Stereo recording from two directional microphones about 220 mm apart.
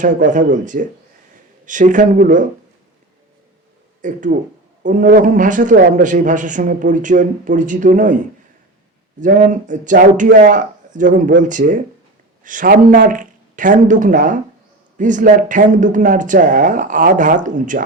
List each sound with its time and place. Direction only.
0.0 s a man's voice: 35° right (ahead or behind)
4.0 s a man's voice: 35° right (ahead or behind)
9.2 s a man's voice: 35° right (ahead or behind)